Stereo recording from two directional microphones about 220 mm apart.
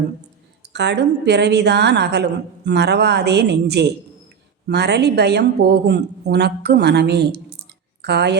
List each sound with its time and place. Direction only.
0.7 s a woman's voice: 50° right (ahead or behind)